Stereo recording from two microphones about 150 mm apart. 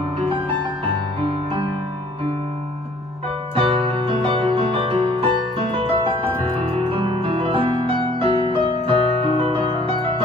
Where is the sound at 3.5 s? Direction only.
35° right (ahead or behind).